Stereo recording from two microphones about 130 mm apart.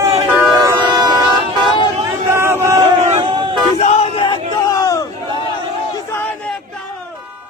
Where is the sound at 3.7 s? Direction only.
55° left (ahead or behind).